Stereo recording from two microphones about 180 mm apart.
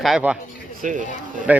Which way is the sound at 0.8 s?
45° right (ahead or behind).